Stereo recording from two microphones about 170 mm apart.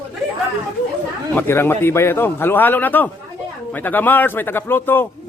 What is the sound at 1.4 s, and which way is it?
A man's voice, 15° left (ahead or behind).